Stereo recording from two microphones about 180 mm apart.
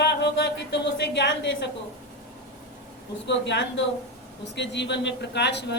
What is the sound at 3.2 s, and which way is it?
A woman's voice, 80° left.